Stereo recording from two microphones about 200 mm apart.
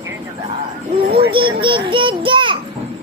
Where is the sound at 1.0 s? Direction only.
50° right (ahead or behind).